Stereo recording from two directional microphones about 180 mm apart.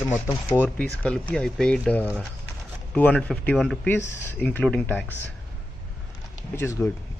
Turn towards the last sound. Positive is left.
turn(degrees=15)  # may be behind; listen again after turning